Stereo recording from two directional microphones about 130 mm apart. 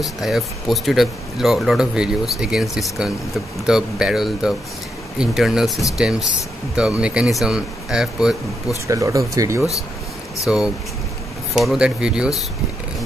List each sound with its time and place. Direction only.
0.0 s speech: centre (ahead or behind)
8.8 s speech: 25° right (ahead or behind)
10.4 s speech: 5° right (ahead or behind)